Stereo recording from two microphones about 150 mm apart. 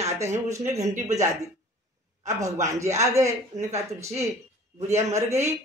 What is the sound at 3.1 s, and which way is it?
Speech, 50° right (ahead or behind).